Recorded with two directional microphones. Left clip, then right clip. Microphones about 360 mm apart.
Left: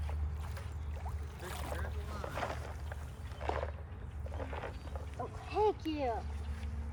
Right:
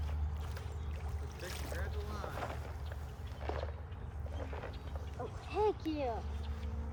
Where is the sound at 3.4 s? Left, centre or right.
Centre.